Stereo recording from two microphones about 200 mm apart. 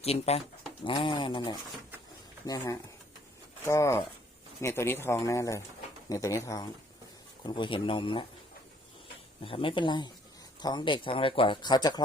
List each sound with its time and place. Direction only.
0.0 s speech: 30° left (ahead or behind)
3.7 s speech: 15° left (ahead or behind)
9.4 s speech: 25° left (ahead or behind)